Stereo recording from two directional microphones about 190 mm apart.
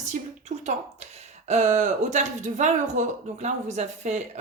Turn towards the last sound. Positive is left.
turn(degrees=-35)  # may be behind; listen again after turning